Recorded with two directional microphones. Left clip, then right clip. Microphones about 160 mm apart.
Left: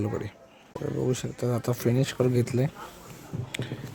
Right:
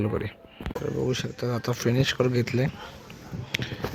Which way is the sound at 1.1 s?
15° left (ahead or behind).